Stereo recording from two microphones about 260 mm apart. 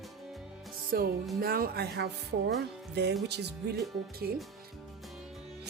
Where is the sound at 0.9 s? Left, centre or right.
Right.